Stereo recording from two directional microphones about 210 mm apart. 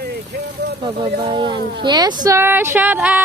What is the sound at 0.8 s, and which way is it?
Speech, 20° right (ahead or behind).